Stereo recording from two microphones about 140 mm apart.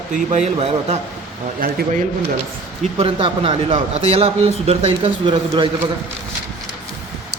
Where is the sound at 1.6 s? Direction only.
90° right.